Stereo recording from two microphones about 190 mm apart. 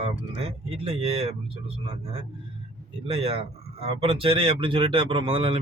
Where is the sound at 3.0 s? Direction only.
30° right (ahead or behind).